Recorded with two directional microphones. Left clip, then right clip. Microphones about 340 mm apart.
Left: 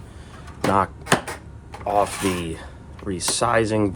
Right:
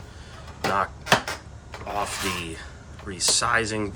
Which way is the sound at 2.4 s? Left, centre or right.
Centre.